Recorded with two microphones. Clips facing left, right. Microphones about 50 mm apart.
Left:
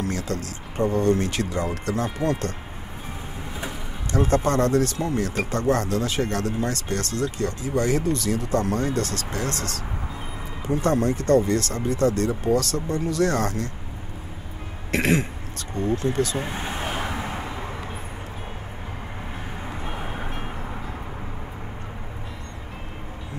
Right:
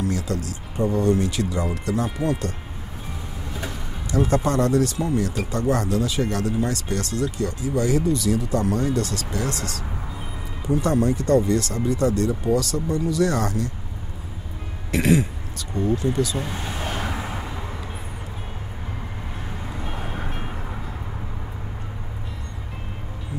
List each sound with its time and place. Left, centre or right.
0.0 s speech: left
4.1 s speech: left
14.9 s speech: left
16.3 s speech: left
16.8 s vehicle: centre
19.8 s vehicle: centre